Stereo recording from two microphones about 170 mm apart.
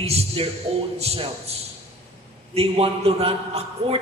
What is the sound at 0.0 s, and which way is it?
A man's voice, 35° right (ahead or behind).